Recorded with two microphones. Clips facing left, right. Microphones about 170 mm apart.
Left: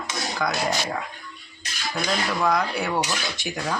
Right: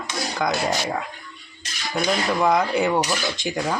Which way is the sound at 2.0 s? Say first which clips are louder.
Right 4 dB; 20° right (ahead or behind).